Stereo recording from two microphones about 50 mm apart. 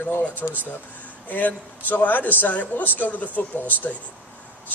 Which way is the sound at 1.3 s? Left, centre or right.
Left.